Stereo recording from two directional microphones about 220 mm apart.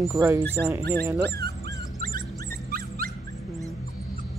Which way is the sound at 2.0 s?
40° right (ahead or behind).